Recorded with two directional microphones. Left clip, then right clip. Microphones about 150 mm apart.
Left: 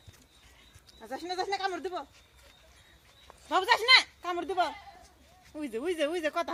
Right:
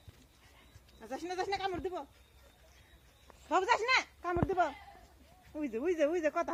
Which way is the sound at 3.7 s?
20° left (ahead or behind).